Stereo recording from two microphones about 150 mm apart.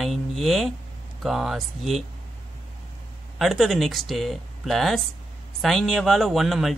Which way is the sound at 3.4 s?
Centre (ahead or behind).